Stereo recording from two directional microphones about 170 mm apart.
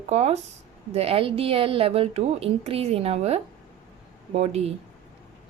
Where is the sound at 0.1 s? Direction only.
40° right (ahead or behind).